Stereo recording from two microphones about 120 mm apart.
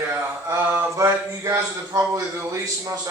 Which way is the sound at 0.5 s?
25° right (ahead or behind).